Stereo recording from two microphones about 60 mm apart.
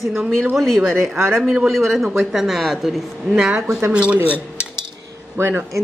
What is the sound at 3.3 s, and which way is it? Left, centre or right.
Speech, centre.